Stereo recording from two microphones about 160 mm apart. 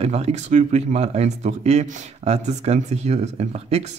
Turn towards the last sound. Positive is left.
turn(degrees=-40)  # may be behind; listen again after turning